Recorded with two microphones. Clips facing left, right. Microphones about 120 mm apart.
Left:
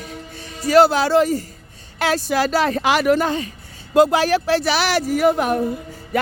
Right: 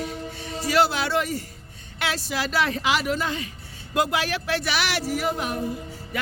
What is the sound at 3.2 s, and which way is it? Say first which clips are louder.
A woman's voice: left 7 dB; 35° left (ahead or behind).